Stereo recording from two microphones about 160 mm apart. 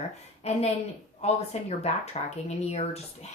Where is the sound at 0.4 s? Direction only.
40° left (ahead or behind).